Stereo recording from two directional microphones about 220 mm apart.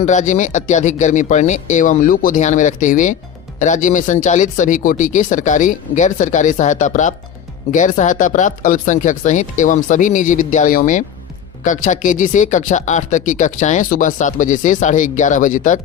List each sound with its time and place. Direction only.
0.0 s speech: 35° left (ahead or behind)